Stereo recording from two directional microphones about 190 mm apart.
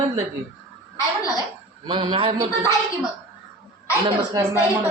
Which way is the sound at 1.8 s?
25° right (ahead or behind).